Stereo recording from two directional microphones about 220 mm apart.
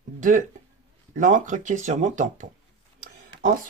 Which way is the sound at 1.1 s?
35° right (ahead or behind).